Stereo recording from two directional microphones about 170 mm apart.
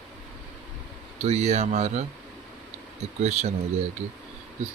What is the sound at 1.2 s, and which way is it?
Speech, 40° right (ahead or behind).